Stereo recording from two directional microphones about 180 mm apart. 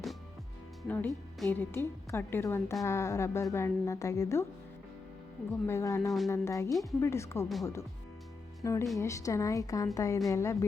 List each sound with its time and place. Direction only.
0.8 s a woman's voice: 10° left (ahead or behind)
5.6 s a woman's voice: 15° left (ahead or behind)